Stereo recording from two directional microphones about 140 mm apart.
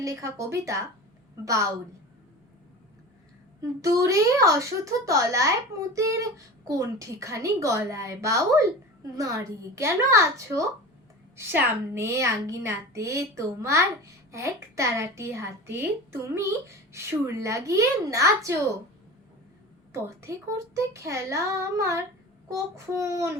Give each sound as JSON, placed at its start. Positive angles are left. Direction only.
{"t": 0.0, "sound": "a child's voice", "side_deg": -20}
{"t": 3.8, "sound": "a child's voice", "side_deg": -25}
{"t": 19.9, "sound": "a child's voice", "side_deg": -20}